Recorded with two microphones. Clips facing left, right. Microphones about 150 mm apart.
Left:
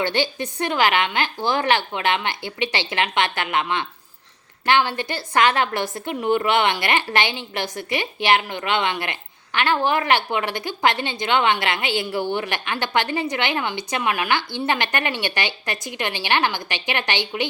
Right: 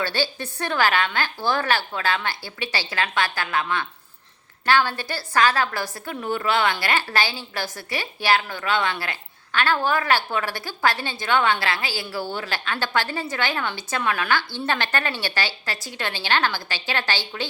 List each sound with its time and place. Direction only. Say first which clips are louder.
0.0 s a woman's voice: left 3 dB; 20° left (ahead or behind)